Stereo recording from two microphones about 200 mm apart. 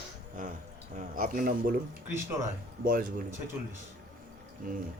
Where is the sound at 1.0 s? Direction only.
40° right (ahead or behind).